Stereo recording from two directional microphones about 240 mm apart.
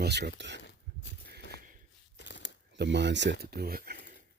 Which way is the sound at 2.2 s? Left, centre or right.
Left.